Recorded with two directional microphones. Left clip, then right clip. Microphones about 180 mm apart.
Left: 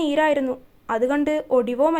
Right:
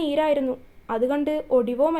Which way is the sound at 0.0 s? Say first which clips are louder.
Left 2 dB; 25° left (ahead or behind).